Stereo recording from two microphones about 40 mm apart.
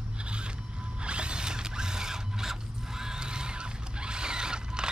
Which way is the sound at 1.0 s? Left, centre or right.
Right.